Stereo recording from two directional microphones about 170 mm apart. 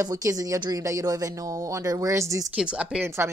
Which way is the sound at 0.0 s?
20° right (ahead or behind).